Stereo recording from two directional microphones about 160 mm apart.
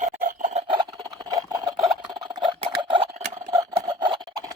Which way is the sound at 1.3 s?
25° right (ahead or behind).